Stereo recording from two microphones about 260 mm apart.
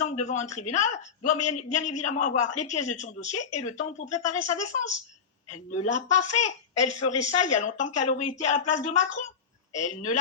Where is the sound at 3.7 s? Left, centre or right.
Left.